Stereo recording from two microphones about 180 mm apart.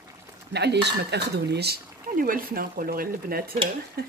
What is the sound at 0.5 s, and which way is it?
Speech, 70° right (ahead or behind).